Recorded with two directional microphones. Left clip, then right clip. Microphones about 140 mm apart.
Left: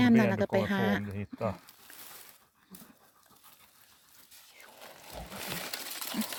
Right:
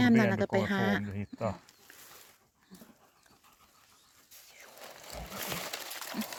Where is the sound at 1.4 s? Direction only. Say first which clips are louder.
Left 1 dB; 30° left (ahead or behind).